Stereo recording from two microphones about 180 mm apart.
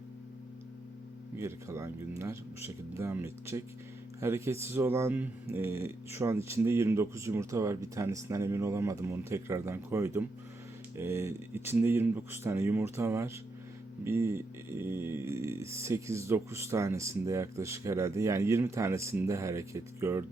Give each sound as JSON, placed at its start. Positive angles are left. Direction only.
{"t": 1.4, "sound": "speech", "side_deg": -15}